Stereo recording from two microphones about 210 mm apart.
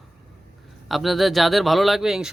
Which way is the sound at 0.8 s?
Centre (ahead or behind).